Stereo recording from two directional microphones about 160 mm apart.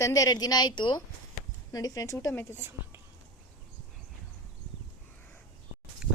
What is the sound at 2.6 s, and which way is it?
Speech, 15° right (ahead or behind).